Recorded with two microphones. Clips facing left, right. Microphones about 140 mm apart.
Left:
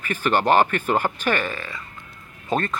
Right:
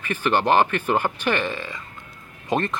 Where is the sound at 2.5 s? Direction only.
20° right (ahead or behind).